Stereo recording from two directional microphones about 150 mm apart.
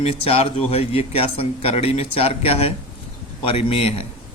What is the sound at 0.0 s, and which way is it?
A man's voice, 40° left (ahead or behind).